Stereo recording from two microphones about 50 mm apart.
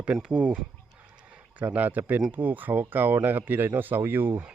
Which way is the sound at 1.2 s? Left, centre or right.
Right.